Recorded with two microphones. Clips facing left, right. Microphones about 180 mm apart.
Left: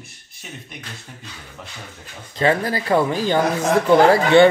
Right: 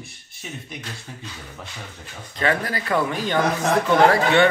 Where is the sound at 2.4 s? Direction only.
30° left (ahead or behind).